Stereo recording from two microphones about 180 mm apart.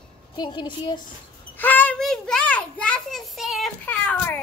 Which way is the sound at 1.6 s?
10° left (ahead or behind).